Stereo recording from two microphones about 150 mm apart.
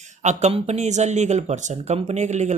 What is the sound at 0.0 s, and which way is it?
Speech, 55° right (ahead or behind).